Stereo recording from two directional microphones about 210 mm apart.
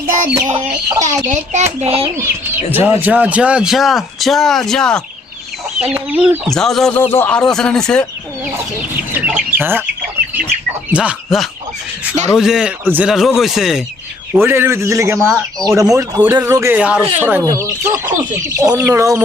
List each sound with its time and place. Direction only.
0.4 s chicken: 20° right (ahead or behind)
1.0 s a child's voice: 35° right (ahead or behind)
1.8 s chicken: 30° right (ahead or behind)
2.7 s a man's voice: 10° right (ahead or behind)
9.1 s speech: 5° right (ahead or behind)
10.9 s a man's voice: 5° right (ahead or behind)
15.3 s a man's voice: centre (ahead or behind)
15.6 s speech: 15° right (ahead or behind)